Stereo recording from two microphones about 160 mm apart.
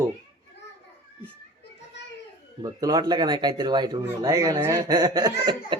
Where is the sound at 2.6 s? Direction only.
25° right (ahead or behind).